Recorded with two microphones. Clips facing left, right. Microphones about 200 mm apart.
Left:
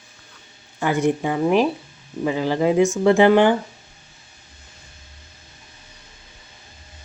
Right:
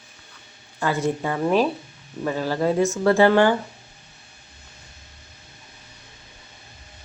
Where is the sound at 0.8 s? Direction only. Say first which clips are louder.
Left 3 dB; 15° left (ahead or behind).